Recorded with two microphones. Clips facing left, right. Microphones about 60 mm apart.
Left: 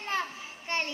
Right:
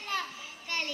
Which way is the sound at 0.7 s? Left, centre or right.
Left.